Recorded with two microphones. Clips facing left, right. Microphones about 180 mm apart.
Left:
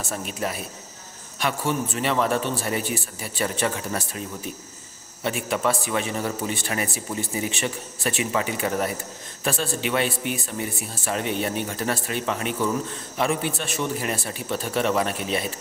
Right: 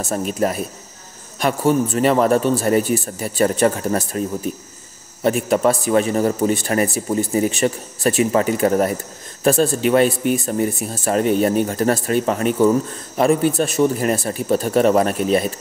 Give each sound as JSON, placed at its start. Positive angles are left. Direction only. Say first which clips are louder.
{"t": 0.0, "sound": "a man's voice", "louder": "right 9 dB", "side_deg": -40}